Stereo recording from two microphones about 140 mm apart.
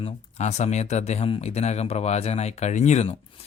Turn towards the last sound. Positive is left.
turn(degrees=50)  # may be behind; listen again after turning